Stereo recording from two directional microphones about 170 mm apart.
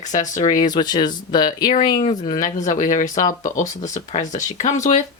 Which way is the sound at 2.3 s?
50° left (ahead or behind).